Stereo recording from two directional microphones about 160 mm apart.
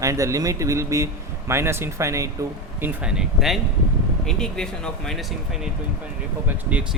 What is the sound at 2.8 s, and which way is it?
Speech, 5° right (ahead or behind).